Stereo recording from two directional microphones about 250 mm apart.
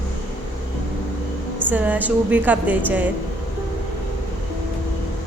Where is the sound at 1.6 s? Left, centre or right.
Centre.